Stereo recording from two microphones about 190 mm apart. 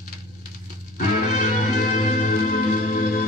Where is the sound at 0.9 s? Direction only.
45° left (ahead or behind).